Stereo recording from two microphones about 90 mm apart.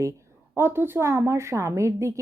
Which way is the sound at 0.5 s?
25° right (ahead or behind).